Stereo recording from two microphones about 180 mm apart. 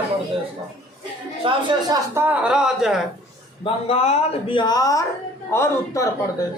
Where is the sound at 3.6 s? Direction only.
35° left (ahead or behind); by 6.1 s 15° left (ahead or behind).